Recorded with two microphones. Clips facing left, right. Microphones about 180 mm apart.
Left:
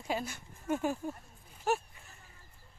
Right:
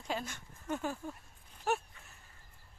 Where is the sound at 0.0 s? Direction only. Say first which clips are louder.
Left 3 dB; 10° left (ahead or behind).